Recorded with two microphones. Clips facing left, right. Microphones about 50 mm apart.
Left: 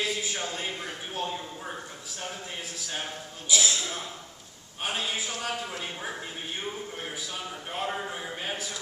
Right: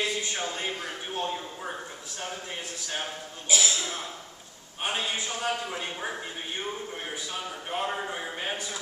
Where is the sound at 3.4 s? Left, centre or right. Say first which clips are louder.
Even; right.